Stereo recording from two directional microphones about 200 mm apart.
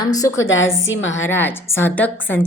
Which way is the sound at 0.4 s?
75° left (ahead or behind).